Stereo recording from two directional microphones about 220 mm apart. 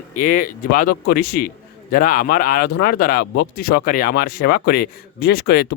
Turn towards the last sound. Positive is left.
turn(degrees=45)  # may be behind; listen again after turning